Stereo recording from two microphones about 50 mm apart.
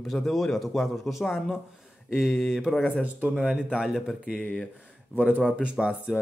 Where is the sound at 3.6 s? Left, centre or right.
Centre.